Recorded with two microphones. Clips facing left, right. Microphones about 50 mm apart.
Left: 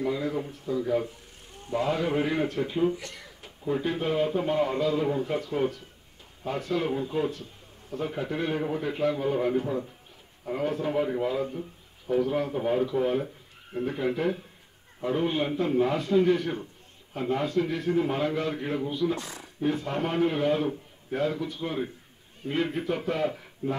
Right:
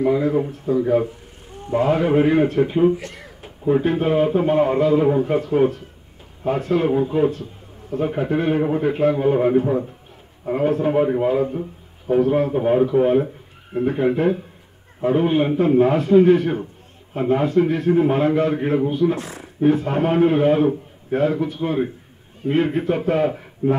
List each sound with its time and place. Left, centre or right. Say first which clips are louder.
0.0 s a man's voice: right 10 dB; right